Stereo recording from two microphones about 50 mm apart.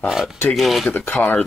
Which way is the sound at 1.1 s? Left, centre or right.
Left.